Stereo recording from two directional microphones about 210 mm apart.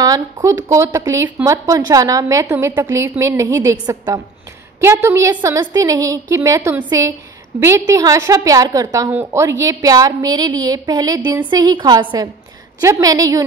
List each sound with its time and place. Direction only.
0.0 s a woman's voice: 15° right (ahead or behind)